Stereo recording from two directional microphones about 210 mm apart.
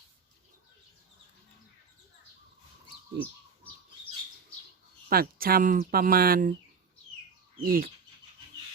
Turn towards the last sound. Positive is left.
turn(degrees=-45)  # may be behind; listen again after turning